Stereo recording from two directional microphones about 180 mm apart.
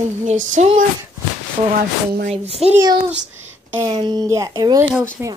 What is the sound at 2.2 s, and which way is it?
Speech, 35° right (ahead or behind).